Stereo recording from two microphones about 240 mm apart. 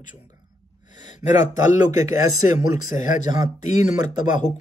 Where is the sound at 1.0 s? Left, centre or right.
Left.